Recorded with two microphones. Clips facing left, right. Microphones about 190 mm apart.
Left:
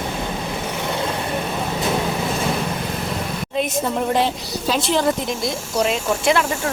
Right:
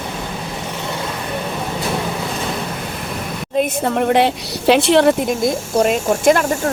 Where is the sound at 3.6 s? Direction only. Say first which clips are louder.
Right 4 dB; 65° right (ahead or behind).